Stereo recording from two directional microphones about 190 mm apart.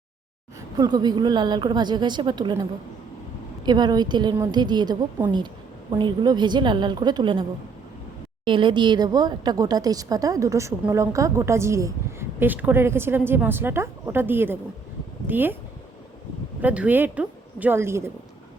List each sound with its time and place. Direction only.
0.8 s a woman's voice: 20° right (ahead or behind)
3.7 s a woman's voice: 20° right (ahead or behind)
8.4 s speech: 25° right (ahead or behind); by 15.5 s 10° right (ahead or behind)
16.6 s a woman's voice: 10° right (ahead or behind)